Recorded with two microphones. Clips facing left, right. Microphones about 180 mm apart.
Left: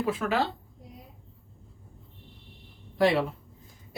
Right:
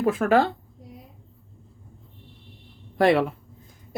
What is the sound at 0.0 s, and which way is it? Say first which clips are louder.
Speech: right 7 dB; 50° right (ahead or behind).